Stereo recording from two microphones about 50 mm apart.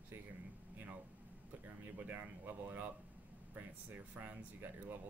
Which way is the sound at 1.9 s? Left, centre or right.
Right.